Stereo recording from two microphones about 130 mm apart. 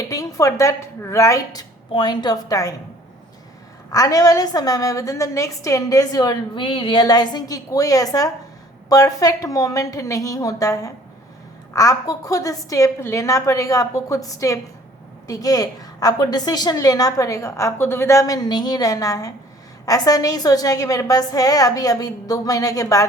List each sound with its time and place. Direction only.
0.1 s a woman's voice: 25° left (ahead or behind)
3.9 s a woman's voice: 25° left (ahead or behind)